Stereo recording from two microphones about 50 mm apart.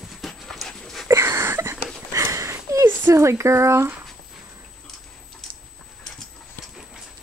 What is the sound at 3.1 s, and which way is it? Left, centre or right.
Speech, right.